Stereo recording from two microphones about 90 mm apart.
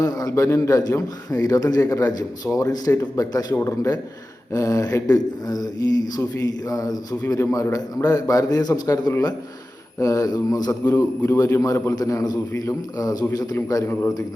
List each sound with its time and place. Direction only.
0.0 s a man's voice: 40° left (ahead or behind)
3.5 s a man's voice: 30° left (ahead or behind)
10.8 s a man's voice: 25° left (ahead or behind)
11.3 s a man's voice: 35° left (ahead or behind)
13.8 s a man's voice: 25° left (ahead or behind)